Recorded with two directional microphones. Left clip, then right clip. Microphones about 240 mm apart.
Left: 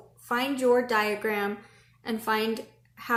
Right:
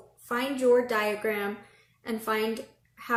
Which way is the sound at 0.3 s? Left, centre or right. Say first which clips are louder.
Even; centre.